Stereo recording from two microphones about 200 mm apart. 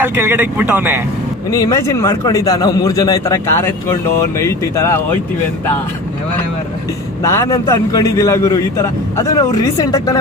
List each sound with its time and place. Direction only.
0.0 s speech: 10° right (ahead or behind)
1.5 s a man's voice: 15° left (ahead or behind)
7.2 s a man's voice: 15° left (ahead or behind)